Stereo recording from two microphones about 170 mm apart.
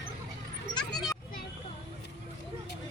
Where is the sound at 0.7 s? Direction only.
Centre (ahead or behind).